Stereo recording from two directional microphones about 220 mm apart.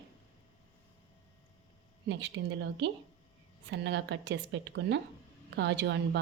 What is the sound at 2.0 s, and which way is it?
A woman's voice, 55° right (ahead or behind).